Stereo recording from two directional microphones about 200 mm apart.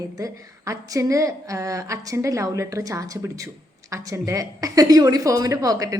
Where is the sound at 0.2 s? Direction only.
15° right (ahead or behind).